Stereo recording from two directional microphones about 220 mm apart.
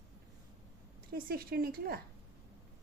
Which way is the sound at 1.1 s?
45° right (ahead or behind).